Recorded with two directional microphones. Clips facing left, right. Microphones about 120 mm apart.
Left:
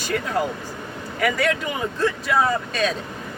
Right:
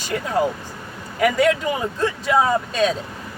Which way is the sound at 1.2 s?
20° right (ahead or behind).